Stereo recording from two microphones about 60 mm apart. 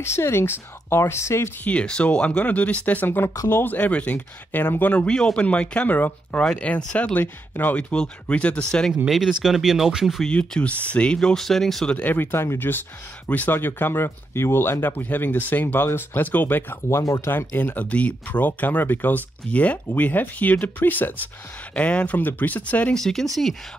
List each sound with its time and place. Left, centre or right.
0.0 s speech: left
1.6 s speech: centre
4.9 s speech: centre
5.9 s speech: left
6.5 s speech: left
7.7 s speech: centre
9.0 s speech: centre
10.2 s speech: centre
11.9 s speech: left
12.2 s speech: left
22.9 s speech: centre